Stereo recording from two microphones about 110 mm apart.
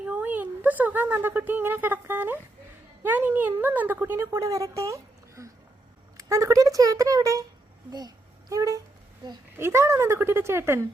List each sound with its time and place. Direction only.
0.0 s a woman's voice: 15° right (ahead or behind)